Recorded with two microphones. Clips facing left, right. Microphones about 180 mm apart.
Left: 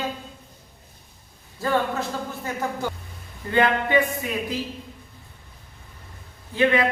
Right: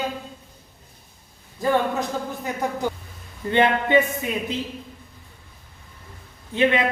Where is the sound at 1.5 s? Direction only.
15° right (ahead or behind).